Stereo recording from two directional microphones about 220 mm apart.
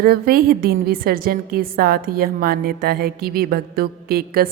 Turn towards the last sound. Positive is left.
turn(degrees=-45)  # may be behind; listen again after turning